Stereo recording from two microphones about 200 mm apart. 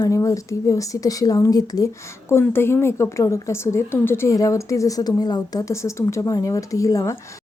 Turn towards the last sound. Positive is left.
turn(degrees=15)  # may be behind; listen again after turning